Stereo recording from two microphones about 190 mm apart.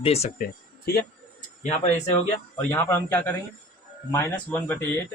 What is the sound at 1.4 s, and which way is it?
Speech, 35° left (ahead or behind).